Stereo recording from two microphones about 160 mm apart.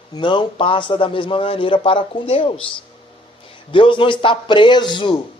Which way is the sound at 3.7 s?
30° left (ahead or behind).